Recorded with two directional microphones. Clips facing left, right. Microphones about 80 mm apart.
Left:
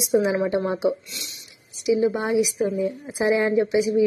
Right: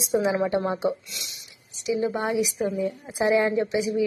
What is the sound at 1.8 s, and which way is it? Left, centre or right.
A woman's voice, centre.